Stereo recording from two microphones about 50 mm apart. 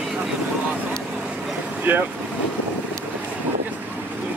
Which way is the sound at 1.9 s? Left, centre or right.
Right.